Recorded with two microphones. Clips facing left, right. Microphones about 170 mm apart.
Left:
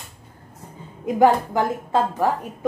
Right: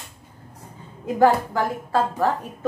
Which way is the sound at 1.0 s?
20° left (ahead or behind).